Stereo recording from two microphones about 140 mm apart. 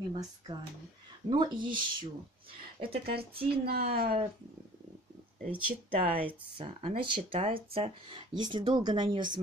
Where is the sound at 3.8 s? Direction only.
90° right.